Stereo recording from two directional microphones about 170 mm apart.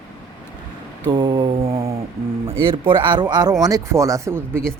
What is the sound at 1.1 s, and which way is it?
Speech, 25° right (ahead or behind).